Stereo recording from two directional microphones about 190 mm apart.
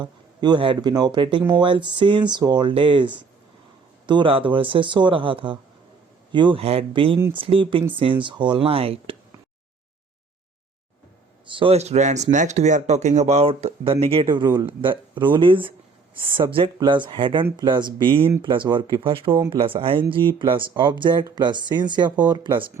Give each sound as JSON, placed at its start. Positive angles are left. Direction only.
{"t": 0.0, "sound": "speech", "side_deg": -25}
{"t": 11.4, "sound": "speech", "side_deg": -25}